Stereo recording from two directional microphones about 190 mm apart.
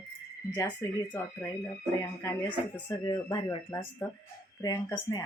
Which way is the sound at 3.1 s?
25° left (ahead or behind).